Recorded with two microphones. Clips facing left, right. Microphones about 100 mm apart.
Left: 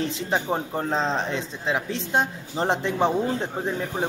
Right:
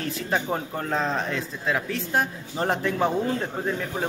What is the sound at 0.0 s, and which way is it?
A man's voice, 20° left (ahead or behind).